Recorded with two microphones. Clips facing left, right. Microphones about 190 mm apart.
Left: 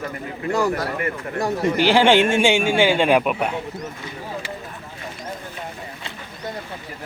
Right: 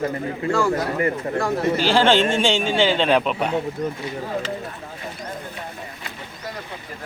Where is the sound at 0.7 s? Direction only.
25° right (ahead or behind).